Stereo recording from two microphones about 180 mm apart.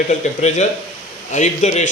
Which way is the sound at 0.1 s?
40° left (ahead or behind).